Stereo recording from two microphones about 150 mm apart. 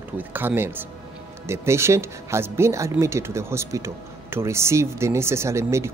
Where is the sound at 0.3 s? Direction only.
15° right (ahead or behind).